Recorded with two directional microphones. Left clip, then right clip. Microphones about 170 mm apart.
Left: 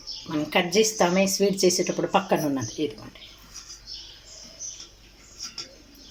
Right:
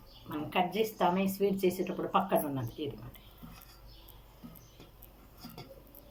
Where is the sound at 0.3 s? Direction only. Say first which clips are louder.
Left 7 dB; 50° left (ahead or behind).